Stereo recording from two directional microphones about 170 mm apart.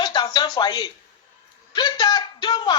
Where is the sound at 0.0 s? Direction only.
25° left (ahead or behind).